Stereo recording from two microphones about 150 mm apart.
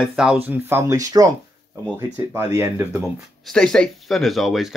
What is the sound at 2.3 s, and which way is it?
Speech, 15° right (ahead or behind).